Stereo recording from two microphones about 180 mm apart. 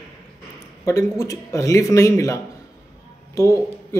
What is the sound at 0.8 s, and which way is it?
Speech, 20° left (ahead or behind).